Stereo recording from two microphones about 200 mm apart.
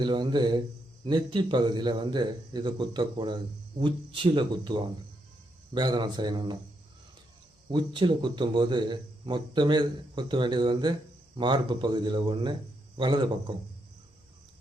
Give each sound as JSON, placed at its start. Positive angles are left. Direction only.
{"t": 0.0, "sound": "speech", "side_deg": -20}
{"t": 7.7, "sound": "speech", "side_deg": -25}